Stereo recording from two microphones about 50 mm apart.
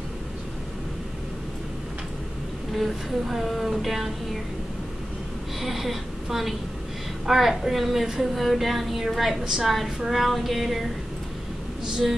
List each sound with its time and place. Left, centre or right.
2.7 s a woman's voice: centre
5.6 s a woman's voice: centre